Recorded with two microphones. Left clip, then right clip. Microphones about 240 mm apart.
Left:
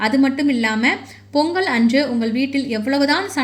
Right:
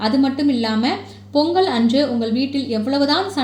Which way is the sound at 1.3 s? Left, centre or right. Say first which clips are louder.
Right 2 dB; left.